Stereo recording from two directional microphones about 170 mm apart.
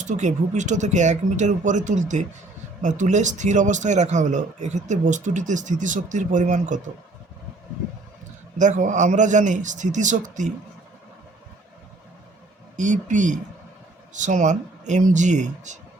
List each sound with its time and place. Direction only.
0.0 s speech: 45° right (ahead or behind)
8.5 s speech: 45° right (ahead or behind)
12.7 s speech: 45° right (ahead or behind)